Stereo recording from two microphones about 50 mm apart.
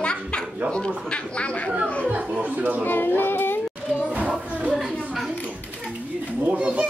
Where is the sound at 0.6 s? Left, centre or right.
Left.